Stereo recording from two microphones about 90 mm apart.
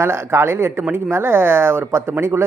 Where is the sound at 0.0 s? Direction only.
30° right (ahead or behind).